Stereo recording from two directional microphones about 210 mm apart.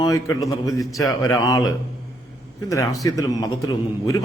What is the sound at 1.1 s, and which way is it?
Speech, 15° left (ahead or behind).